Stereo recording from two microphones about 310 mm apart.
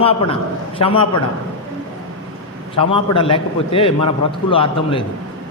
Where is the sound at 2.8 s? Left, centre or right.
Centre.